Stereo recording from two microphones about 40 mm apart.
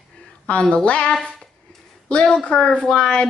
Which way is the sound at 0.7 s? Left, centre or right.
Left.